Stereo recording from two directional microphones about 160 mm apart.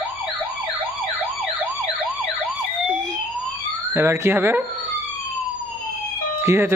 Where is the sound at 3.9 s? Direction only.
15° right (ahead or behind).